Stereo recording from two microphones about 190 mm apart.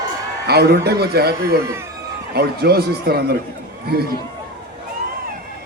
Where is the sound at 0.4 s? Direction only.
55° right (ahead or behind).